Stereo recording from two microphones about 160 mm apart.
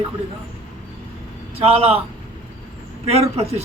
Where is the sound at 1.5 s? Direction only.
40° right (ahead or behind).